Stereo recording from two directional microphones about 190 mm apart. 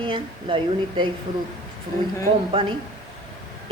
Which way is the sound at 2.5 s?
25° right (ahead or behind).